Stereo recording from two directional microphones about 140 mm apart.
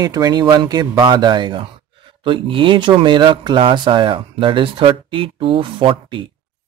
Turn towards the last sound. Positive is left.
turn(degrees=-35)  # may be behind; listen again after turning